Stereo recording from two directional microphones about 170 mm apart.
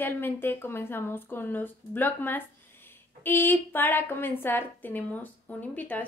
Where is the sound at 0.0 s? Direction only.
10° left (ahead or behind).